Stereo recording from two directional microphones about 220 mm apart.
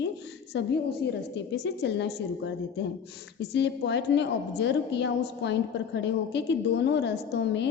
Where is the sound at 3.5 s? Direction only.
50° left (ahead or behind).